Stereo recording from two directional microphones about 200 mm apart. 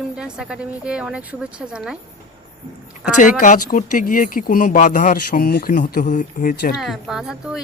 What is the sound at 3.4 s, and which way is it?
Speech, 40° left (ahead or behind).